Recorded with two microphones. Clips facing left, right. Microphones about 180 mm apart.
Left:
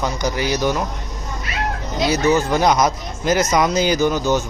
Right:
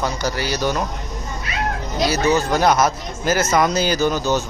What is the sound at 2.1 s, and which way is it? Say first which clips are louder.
Speech: left 2 dB; 10° left (ahead or behind).